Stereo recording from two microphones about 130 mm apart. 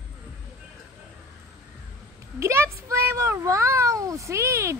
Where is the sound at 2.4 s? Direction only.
20° right (ahead or behind).